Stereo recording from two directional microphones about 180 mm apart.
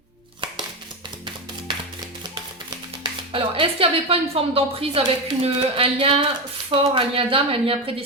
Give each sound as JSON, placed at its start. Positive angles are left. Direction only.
{"t": 3.3, "sound": "a woman's voice", "side_deg": -30}